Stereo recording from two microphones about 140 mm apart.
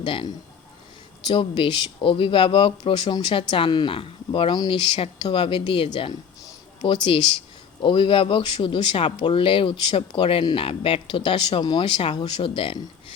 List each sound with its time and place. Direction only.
0.0 s a man's voice: 35° left (ahead or behind)
1.3 s speech: 35° left (ahead or behind)